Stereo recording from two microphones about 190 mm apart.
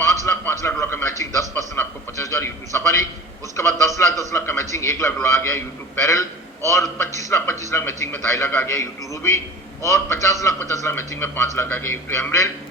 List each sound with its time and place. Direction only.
0.0 s television: 15° left (ahead or behind)
0.7 s a man's voice: 10° left (ahead or behind)